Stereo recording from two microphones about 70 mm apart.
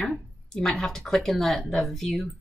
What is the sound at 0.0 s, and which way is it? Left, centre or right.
Speech, centre.